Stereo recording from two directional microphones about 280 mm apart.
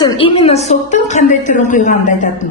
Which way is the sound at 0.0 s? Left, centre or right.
Centre.